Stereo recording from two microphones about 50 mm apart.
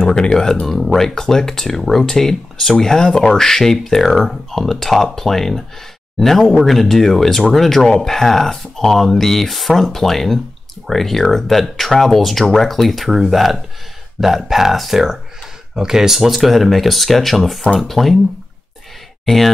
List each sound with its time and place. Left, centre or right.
0.0 s speech: centre
19.2 s speech: centre